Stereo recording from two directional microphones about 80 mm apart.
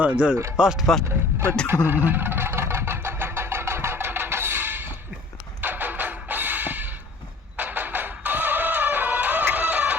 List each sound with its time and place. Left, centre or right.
0.0 s speech: centre
1.6 s vehicle: right
5.6 s music: right